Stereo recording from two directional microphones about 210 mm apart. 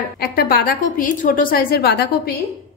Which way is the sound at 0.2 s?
45° left (ahead or behind).